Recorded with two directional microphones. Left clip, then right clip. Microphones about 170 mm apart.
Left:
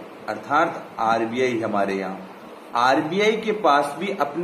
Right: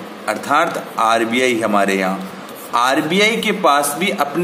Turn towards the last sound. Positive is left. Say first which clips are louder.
# right 6 dB
turn(degrees=-35)  # may be behind; listen again after turning